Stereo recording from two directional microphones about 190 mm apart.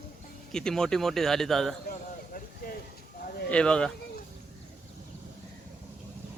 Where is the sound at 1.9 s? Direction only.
45° left (ahead or behind).